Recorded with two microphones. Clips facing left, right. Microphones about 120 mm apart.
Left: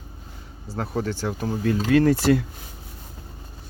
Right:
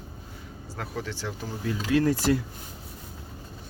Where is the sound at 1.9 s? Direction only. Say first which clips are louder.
Left 4 dB; 70° left (ahead or behind).